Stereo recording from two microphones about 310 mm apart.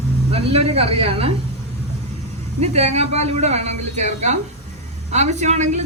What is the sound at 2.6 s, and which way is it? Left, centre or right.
A woman's voice, right.